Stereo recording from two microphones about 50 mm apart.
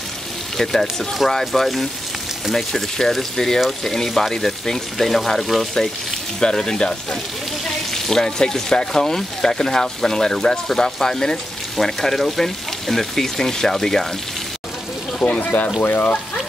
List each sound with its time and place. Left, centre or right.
0.6 s speech: centre
6.4 s speech: centre
15.1 s speech: left
15.8 s speech: left